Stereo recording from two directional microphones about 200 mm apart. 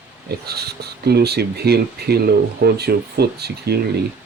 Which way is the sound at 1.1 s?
55° right (ahead or behind).